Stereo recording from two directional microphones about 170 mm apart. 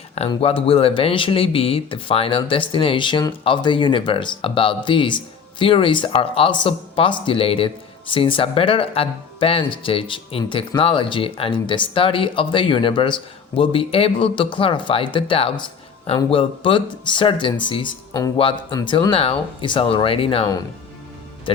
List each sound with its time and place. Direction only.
0.3 s speech: 30° left (ahead or behind)